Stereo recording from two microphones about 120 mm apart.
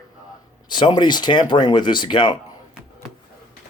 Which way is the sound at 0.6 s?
40° left (ahead or behind).